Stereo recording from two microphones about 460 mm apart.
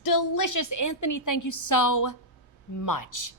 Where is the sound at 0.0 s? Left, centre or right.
Left.